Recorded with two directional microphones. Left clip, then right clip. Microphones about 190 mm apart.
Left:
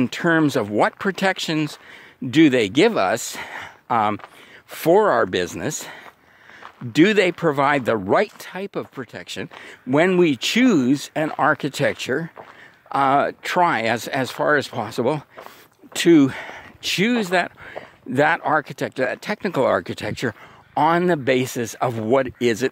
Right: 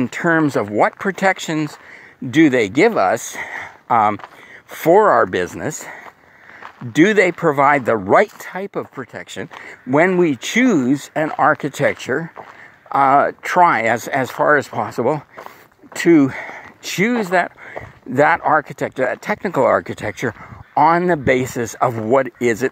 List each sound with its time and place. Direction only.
0.0 s speech: 30° left (ahead or behind)